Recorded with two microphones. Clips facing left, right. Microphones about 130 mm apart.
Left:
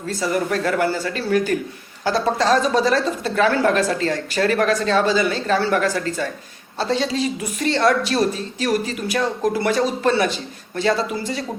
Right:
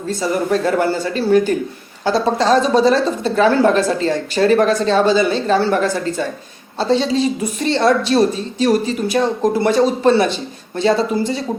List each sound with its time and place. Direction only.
0.1 s a woman's voice: 25° right (ahead or behind)